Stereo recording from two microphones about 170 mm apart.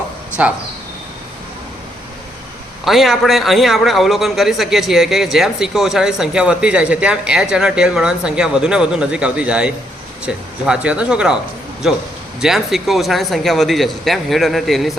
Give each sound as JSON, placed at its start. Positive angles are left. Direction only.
{"t": 0.4, "sound": "speech", "side_deg": -10}
{"t": 2.8, "sound": "a man's voice", "side_deg": 0}